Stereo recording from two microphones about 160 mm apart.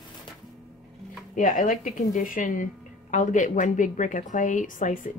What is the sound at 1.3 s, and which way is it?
Speech, 55° left (ahead or behind).